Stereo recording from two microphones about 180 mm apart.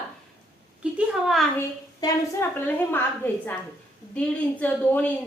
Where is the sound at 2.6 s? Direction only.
10° left (ahead or behind).